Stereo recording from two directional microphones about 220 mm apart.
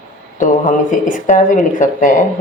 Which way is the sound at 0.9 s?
35° left (ahead or behind).